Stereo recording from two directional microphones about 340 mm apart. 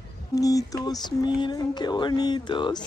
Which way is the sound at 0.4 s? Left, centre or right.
Centre.